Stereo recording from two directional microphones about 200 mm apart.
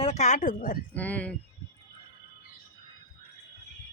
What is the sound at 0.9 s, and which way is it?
Speech, 5° left (ahead or behind).